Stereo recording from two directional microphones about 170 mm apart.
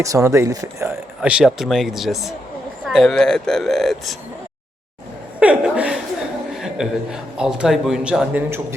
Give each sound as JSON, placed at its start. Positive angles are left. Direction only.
{"t": 0.0, "sound": "speech", "side_deg": -20}
{"t": 1.2, "sound": "a man's voice", "side_deg": -5}
{"t": 5.4, "sound": "a man's voice", "side_deg": -5}